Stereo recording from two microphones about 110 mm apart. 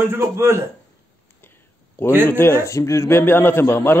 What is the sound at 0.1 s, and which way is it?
Speech, 25° right (ahead or behind).